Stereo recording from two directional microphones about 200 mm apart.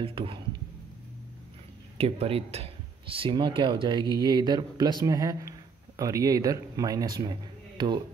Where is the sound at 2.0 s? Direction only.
30° right (ahead or behind).